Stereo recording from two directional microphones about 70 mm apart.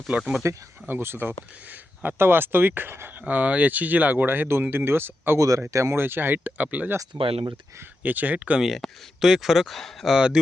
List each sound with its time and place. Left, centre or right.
0.1 s speech: right
3.2 s speech: right
5.4 s speech: right
6.0 s speech: right
7.0 s speech: right
8.0 s speech: right
8.6 s speech: centre